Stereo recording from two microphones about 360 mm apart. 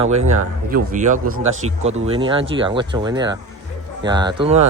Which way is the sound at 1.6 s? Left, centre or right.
Centre.